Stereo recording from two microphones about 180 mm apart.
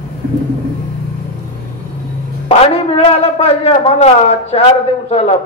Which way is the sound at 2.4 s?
35° left (ahead or behind).